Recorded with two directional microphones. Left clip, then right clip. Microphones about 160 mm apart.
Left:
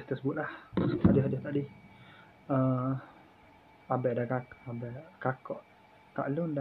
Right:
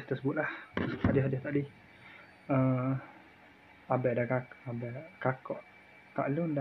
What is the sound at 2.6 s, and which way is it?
Speech, 10° right (ahead or behind).